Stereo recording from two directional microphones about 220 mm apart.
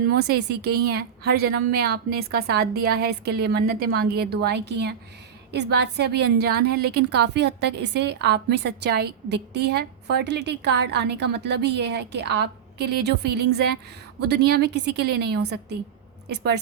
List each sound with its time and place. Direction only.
0.1 s a woman's voice: 50° right (ahead or behind)